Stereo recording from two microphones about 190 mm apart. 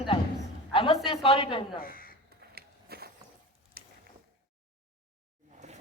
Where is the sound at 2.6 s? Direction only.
55° right (ahead or behind).